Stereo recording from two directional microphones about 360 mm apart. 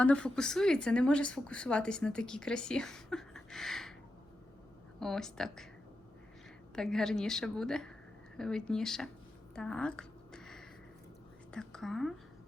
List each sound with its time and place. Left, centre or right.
0.0 s a woman's voice: centre
4.9 s a woman's voice: centre
6.7 s a woman's voice: centre
9.6 s a sound: centre
11.5 s a woman's voice: centre